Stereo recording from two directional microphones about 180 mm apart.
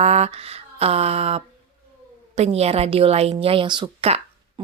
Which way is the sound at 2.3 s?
35° right (ahead or behind).